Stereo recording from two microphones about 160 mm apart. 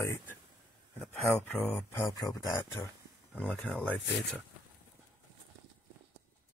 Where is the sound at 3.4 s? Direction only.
10° left (ahead or behind).